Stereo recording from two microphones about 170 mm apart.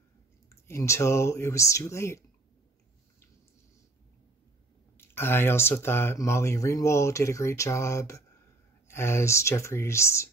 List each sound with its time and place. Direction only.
0.5 s speech: 15° left (ahead or behind)
4.9 s speech: 15° left (ahead or behind)